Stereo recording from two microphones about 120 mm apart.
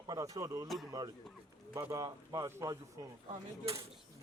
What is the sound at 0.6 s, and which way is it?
Speech, centre (ahead or behind).